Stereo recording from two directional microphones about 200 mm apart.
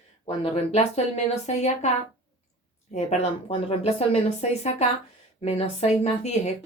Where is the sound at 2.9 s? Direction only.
30° left (ahead or behind).